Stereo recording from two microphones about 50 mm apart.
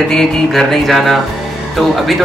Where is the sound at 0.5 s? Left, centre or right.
Centre.